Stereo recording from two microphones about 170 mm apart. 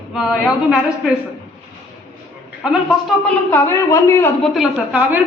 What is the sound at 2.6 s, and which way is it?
Speech, centre (ahead or behind).